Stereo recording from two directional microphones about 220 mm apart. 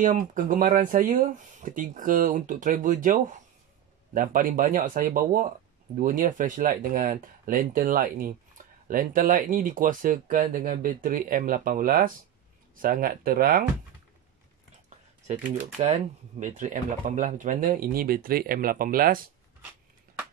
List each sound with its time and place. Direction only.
0.0 s speech: 35° right (ahead or behind)
15.8 s speech: 30° right (ahead or behind)